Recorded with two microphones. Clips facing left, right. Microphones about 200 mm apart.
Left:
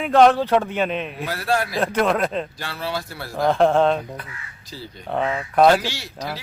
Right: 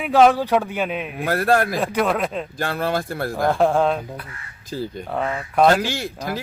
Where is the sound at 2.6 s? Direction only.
50° right (ahead or behind).